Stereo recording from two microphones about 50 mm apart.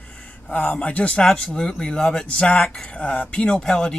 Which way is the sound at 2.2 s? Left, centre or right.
Left.